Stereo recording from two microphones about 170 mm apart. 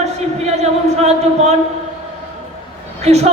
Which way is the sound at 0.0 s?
40° right (ahead or behind).